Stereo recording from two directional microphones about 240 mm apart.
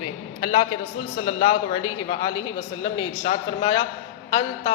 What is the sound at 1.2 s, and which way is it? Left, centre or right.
A woman's voice, left.